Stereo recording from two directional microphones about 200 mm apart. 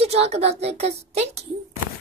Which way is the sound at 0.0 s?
30° right (ahead or behind).